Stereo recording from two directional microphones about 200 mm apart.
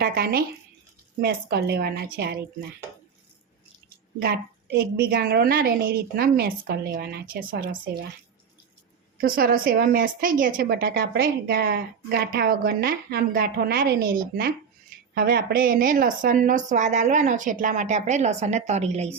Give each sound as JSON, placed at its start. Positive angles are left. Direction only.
{"t": 0.0, "sound": "a woman's voice", "side_deg": -50}
{"t": 4.2, "sound": "a woman's voice", "side_deg": -50}
{"t": 9.2, "sound": "a woman's voice", "side_deg": -45}